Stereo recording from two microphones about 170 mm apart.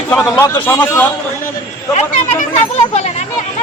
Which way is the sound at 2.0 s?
45° left (ahead or behind).